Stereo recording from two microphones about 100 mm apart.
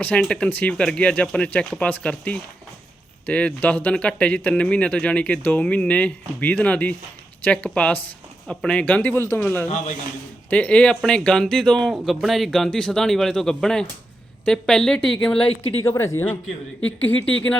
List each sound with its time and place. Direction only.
0.0 s speech: 15° left (ahead or behind)
15.7 s speech: 25° left (ahead or behind)